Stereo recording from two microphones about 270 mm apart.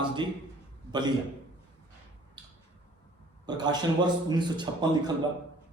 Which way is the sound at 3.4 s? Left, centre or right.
Centre.